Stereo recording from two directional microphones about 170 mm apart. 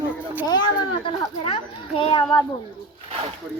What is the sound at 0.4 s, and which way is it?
Children playing, 25° left (ahead or behind).